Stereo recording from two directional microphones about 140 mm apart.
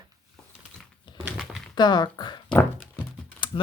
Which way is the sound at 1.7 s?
30° left (ahead or behind).